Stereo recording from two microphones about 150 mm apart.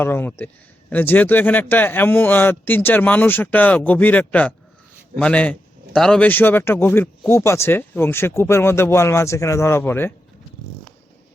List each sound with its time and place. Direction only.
0.0 s a man's voice: 15° left (ahead or behind)